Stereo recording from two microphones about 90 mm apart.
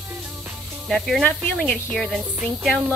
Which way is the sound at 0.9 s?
5° left (ahead or behind).